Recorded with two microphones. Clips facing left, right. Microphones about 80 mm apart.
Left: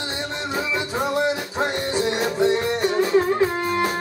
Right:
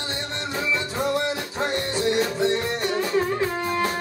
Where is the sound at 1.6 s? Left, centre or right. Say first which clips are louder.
Left 1 dB; centre.